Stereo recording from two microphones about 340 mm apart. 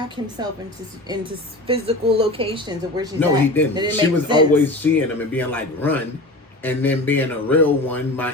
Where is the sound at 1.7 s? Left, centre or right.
Centre.